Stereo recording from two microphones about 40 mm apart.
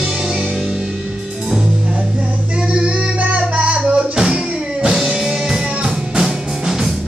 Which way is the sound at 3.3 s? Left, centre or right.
Right.